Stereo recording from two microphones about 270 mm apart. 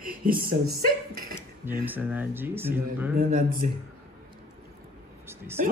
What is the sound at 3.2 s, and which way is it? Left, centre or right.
Speech, right.